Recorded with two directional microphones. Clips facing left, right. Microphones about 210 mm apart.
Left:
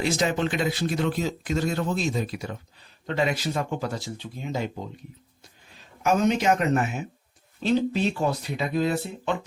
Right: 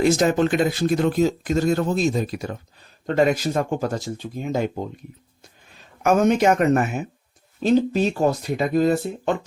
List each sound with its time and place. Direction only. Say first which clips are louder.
0.0 s speech: right 7 dB; 45° right (ahead or behind)
6.0 s speech: right 5 dB; 50° right (ahead or behind)